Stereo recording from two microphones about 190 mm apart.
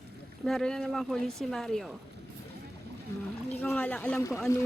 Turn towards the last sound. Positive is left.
turn(degrees=15)  # may be behind; listen again after turning